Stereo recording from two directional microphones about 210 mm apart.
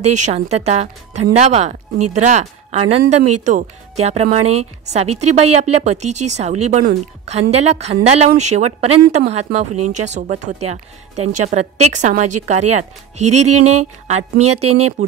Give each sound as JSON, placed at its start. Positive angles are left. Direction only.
{"t": 0.1, "sound": "a woman's voice", "side_deg": -35}